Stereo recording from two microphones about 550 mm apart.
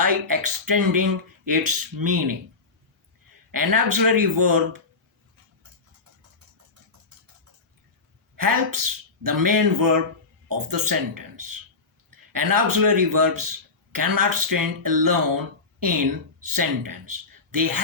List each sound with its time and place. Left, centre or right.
0.0 s speech: right
3.5 s speech: right
8.4 s a man's voice: right